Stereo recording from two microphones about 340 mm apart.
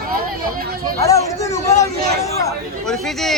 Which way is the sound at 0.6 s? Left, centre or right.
Right.